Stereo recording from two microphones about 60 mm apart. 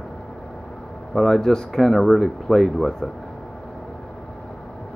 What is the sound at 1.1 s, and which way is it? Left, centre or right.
Speech, centre.